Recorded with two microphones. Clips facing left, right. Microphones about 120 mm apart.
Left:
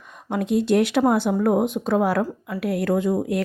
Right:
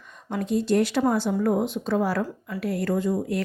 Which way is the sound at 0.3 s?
65° left (ahead or behind).